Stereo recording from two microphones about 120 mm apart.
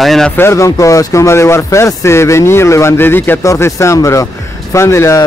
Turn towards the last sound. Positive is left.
turn(degrees=25)  # may be behind; listen again after turning